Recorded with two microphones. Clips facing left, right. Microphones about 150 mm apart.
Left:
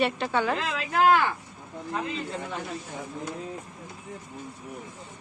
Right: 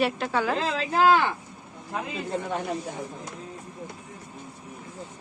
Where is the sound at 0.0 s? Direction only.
Centre (ahead or behind).